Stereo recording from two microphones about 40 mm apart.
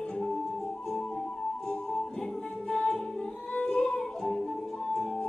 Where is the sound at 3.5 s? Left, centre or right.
Left.